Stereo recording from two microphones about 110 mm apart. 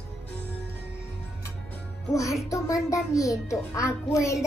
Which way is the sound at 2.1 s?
30° left (ahead or behind).